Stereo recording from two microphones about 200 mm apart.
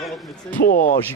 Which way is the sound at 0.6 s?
45° left (ahead or behind).